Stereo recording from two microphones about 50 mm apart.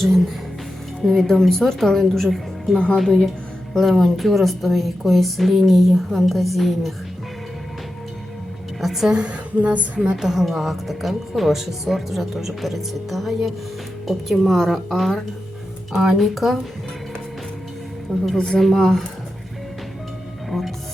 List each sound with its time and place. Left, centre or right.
1.0 s a woman's voice: centre
2.7 s a woman's voice: centre
3.8 s a woman's voice: centre
8.8 s a woman's voice: centre
9.1 s speech: right
10.0 s a woman's voice: centre
15.9 s a woman's voice: centre
18.3 s a woman's voice: centre
20.5 s music: centre